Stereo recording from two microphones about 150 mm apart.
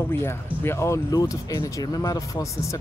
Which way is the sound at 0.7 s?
20° left (ahead or behind).